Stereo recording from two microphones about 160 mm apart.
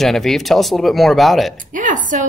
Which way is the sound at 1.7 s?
55° right (ahead or behind).